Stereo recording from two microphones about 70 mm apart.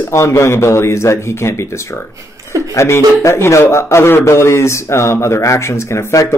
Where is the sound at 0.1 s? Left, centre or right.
Left.